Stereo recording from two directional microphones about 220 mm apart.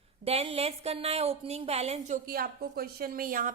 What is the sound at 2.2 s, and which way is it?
A woman's voice, 40° right (ahead or behind).